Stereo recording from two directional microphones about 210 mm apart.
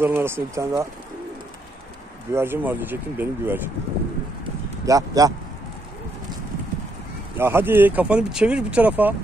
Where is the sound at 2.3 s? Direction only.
10° right (ahead or behind).